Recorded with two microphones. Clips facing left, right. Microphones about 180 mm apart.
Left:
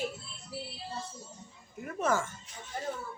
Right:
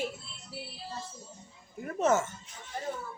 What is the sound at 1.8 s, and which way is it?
Speech, 25° right (ahead or behind).